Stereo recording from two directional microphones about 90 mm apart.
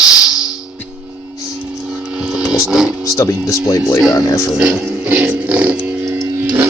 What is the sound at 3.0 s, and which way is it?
Speech, 35° left (ahead or behind).